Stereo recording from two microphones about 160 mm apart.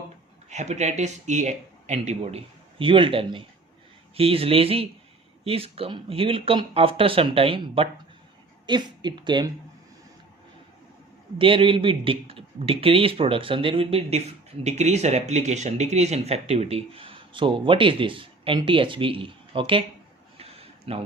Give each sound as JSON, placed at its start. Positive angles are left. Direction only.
{"t": 0.5, "sound": "speech", "side_deg": -45}
{"t": 11.3, "sound": "speech", "side_deg": -35}
{"t": 20.4, "sound": "a sound", "side_deg": -40}